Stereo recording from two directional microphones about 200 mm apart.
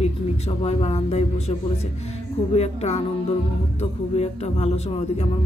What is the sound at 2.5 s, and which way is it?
Speech, 35° left (ahead or behind).